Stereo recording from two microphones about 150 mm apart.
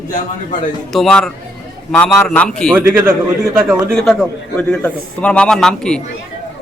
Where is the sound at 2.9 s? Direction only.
15° right (ahead or behind).